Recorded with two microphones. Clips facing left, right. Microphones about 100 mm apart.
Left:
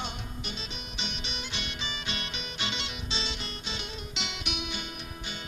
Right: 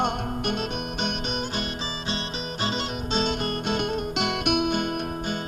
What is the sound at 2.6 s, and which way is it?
Music, 40° right (ahead or behind).